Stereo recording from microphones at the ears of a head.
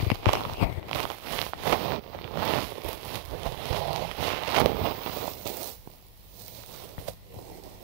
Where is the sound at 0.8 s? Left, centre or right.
Right.